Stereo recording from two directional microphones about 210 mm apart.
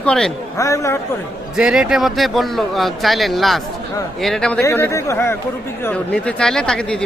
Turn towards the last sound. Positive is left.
turn(degrees=5)  # may be behind; listen again after turning